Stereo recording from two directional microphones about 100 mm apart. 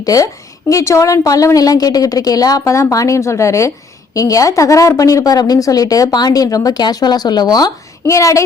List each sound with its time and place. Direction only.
0.0 s a woman's voice: 35° left (ahead or behind)